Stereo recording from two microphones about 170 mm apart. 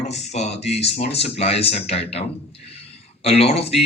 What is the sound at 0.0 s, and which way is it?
A man's voice, 40° left (ahead or behind).